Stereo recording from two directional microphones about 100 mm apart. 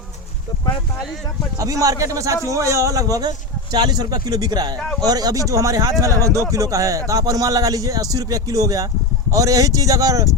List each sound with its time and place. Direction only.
1.5 s speech: 35° right (ahead or behind)